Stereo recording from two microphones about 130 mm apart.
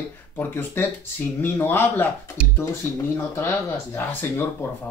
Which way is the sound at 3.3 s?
20° left (ahead or behind).